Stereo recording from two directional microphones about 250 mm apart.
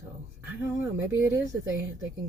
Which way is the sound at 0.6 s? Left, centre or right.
Centre.